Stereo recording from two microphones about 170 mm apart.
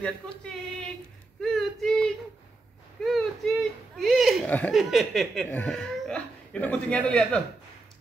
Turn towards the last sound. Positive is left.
turn(degrees=5)  # may be behind; listen again after turning